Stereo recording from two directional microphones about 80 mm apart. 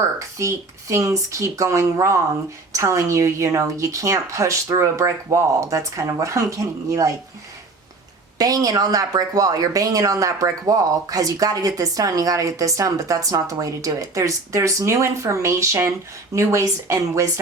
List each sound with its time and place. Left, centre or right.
0.0 s a woman's voice: right
8.4 s a woman's voice: right